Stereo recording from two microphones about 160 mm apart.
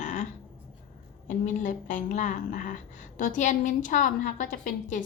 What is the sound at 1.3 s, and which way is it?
A woman's voice, 50° left (ahead or behind).